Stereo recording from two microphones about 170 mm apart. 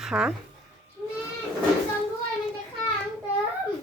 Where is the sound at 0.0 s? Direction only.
5° right (ahead or behind).